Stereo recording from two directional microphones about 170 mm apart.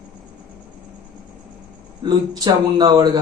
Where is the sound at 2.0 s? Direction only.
25° right (ahead or behind).